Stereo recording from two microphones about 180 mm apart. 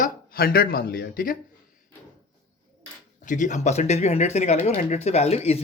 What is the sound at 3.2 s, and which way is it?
Speech, 45° left (ahead or behind).